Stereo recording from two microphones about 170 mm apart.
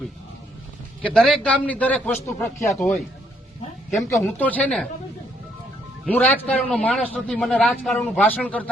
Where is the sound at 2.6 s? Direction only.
Centre (ahead or behind).